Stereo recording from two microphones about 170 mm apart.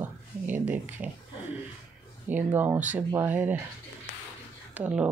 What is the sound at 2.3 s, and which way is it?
Speech, 10° right (ahead or behind).